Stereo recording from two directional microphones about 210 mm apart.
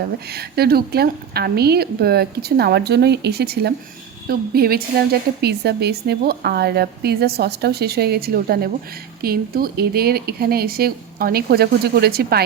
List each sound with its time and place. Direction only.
0.3 s a woman's voice: 50° right (ahead or behind)